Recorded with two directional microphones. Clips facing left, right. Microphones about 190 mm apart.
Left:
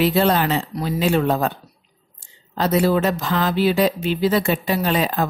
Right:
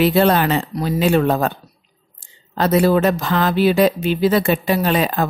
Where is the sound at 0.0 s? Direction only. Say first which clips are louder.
Right 3 dB; 60° right (ahead or behind).